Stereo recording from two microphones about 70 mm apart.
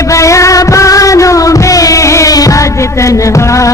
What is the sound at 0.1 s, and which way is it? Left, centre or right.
Music, left.